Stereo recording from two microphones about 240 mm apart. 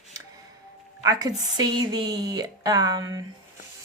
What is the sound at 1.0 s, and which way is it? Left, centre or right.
A woman's voice, centre.